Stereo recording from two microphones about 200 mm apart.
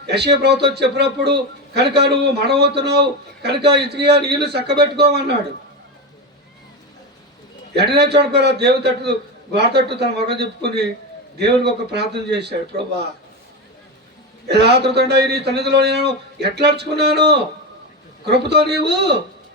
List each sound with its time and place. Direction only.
0.0 s a man's voice: 55° right (ahead or behind)
7.8 s a man's voice: 55° right (ahead or behind)
14.5 s a man's voice: 55° right (ahead or behind)